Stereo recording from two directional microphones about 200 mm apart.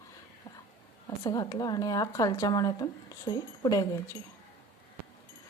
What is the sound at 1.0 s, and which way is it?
Speech, 20° left (ahead or behind).